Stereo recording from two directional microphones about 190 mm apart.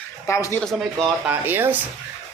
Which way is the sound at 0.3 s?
15° left (ahead or behind).